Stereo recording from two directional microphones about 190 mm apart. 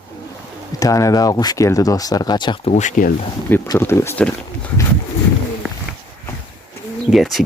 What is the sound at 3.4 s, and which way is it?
Speech, 10° left (ahead or behind).